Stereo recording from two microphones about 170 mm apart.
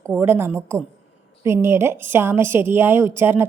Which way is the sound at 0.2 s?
15° right (ahead or behind).